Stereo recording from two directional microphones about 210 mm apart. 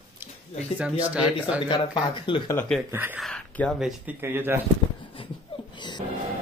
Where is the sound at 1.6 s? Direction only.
20° left (ahead or behind).